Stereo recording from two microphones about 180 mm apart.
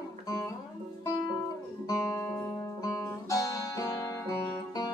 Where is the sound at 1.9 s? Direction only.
15° left (ahead or behind).